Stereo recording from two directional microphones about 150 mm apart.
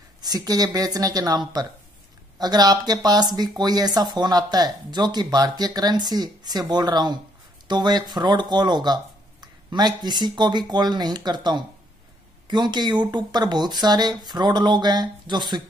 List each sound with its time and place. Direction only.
0.2 s speech: 25° right (ahead or behind)